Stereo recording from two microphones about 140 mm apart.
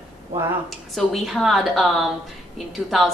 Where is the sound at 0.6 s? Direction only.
Centre (ahead or behind).